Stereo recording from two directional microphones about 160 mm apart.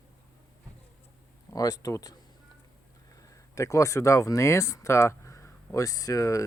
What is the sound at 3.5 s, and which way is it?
Speech, 20° left (ahead or behind).